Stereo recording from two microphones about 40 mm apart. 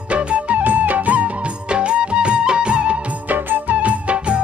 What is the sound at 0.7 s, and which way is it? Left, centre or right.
Music, right.